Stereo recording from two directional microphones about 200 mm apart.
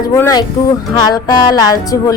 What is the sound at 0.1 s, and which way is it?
A woman's voice, 20° left (ahead or behind).